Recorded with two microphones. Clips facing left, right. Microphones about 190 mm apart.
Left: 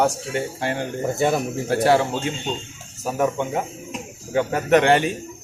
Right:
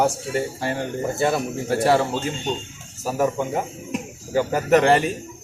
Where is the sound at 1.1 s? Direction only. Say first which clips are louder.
Left 1 dB; 15° left (ahead or behind).